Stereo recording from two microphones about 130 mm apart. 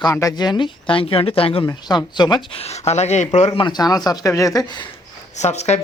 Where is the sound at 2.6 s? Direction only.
55° left (ahead or behind).